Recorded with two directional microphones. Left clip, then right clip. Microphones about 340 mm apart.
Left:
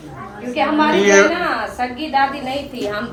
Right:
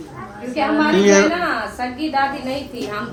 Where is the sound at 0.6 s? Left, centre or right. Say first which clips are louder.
Left 2 dB; left.